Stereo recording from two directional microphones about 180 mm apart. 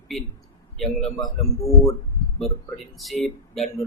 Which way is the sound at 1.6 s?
15° left (ahead or behind).